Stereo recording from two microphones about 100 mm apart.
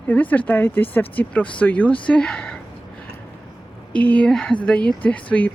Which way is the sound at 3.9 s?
15° left (ahead or behind).